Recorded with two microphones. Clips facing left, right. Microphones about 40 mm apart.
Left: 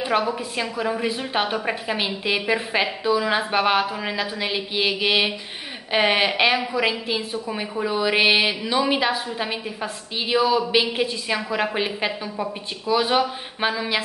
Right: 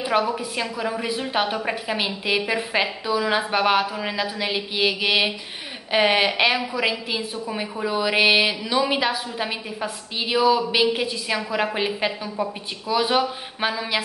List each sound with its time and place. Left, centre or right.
0.0 s a woman's voice: centre